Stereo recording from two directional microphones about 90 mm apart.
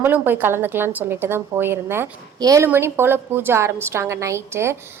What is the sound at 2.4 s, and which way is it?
Speech, 40° right (ahead or behind).